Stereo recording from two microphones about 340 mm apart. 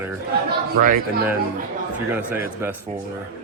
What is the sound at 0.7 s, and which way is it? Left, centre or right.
Speech, right.